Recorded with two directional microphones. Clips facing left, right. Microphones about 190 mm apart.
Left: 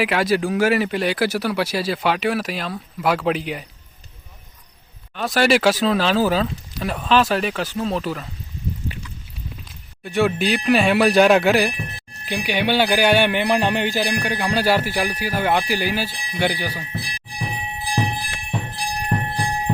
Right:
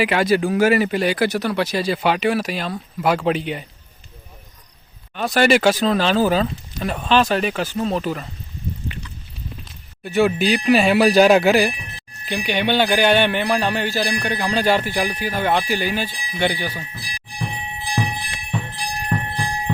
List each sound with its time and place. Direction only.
0.0 s speech: centre (ahead or behind)
5.1 s speech: centre (ahead or behind)
9.6 s speech: centre (ahead or behind)
19.1 s music: 20° left (ahead or behind)